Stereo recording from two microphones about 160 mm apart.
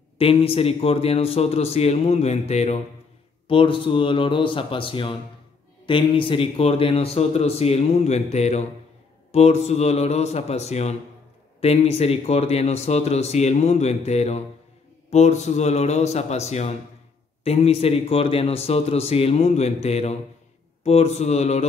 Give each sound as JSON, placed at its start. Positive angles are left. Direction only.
{"t": 0.2, "sound": "a man's voice", "side_deg": 35}